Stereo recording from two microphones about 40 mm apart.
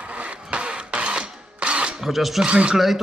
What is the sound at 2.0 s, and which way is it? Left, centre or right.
Speech, centre.